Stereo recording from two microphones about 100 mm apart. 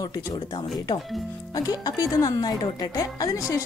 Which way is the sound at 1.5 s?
40° left (ahead or behind).